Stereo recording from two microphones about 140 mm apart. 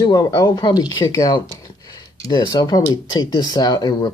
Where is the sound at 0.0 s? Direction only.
25° left (ahead or behind).